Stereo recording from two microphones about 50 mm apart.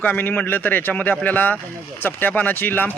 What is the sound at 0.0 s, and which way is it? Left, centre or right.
Speech, left.